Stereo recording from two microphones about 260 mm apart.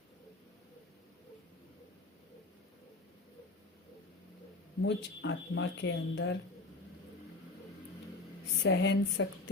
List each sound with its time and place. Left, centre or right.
4.8 s speech: left
8.6 s speech: left